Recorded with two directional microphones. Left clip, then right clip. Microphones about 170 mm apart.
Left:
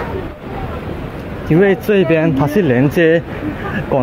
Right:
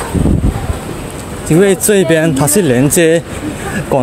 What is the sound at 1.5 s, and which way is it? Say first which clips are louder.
Speech: right 3 dB; 25° right (ahead or behind).